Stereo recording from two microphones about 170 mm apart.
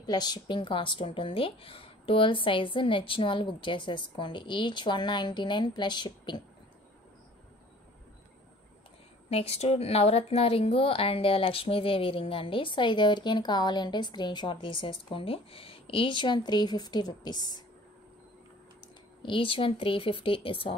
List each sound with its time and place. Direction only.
0.0 s speech: 25° left (ahead or behind)
9.3 s a woman's voice: 35° left (ahead or behind)
19.2 s a woman's voice: 30° left (ahead or behind)